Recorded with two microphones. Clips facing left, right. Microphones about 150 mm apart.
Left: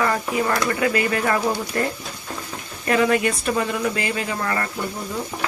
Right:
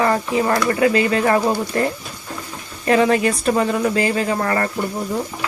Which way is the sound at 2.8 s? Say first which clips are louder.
Right 3 dB; 30° right (ahead or behind).